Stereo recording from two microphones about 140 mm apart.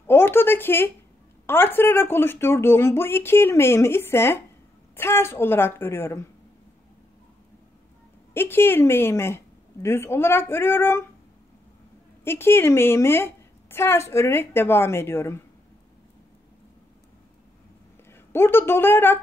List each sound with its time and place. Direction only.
0.0 s a woman's voice: 15° left (ahead or behind)
8.3 s a woman's voice: 15° left (ahead or behind)
12.3 s a woman's voice: 15° left (ahead or behind)
18.1 s a woman's voice: 15° left (ahead or behind)